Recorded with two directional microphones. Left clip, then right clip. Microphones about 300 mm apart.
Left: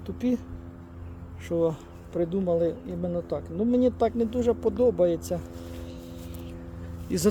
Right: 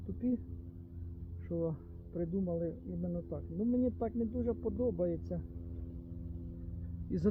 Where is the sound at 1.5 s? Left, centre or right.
Centre.